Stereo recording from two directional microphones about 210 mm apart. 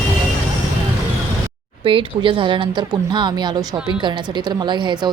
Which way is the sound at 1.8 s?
25° right (ahead or behind).